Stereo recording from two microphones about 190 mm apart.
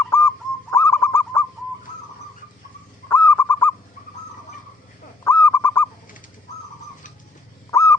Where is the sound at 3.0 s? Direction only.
10° left (ahead or behind).